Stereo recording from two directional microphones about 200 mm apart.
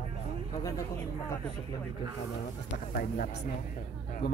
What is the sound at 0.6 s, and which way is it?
Speech, 15° left (ahead or behind).